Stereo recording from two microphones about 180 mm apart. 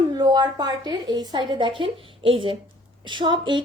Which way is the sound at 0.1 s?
25° right (ahead or behind).